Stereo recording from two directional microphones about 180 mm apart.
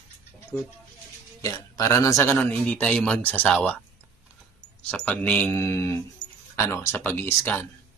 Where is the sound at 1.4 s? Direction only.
20° left (ahead or behind).